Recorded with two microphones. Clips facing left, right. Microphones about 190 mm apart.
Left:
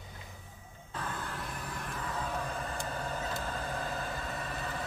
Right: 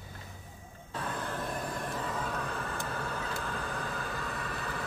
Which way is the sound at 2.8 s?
20° left (ahead or behind).